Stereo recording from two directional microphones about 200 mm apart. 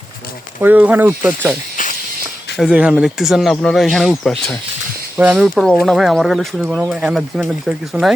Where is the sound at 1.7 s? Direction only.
40° left (ahead or behind).